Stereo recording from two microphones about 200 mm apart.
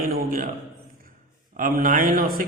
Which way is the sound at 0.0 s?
45° right (ahead or behind).